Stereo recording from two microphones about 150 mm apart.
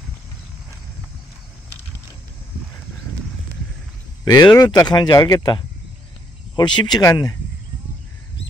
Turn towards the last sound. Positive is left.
turn(degrees=25)  # may be behind; listen again after turning